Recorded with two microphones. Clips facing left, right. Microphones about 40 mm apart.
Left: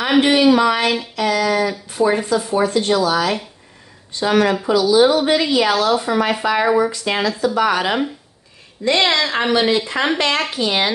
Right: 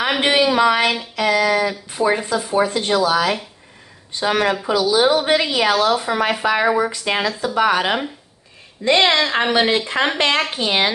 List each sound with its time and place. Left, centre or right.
0.6 s speech: right
4.1 s speech: right